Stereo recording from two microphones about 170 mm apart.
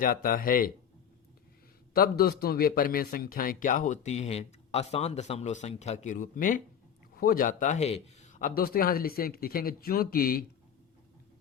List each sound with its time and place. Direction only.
0.0 s a man's voice: 55° left (ahead or behind)
1.9 s a man's voice: 65° left (ahead or behind)